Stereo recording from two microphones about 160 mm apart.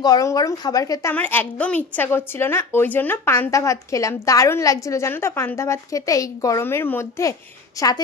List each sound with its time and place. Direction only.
0.0 s speech: 20° left (ahead or behind)
1.1 s a woman's voice: 10° left (ahead or behind)